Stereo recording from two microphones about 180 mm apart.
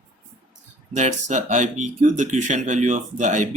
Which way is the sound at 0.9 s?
40° right (ahead or behind).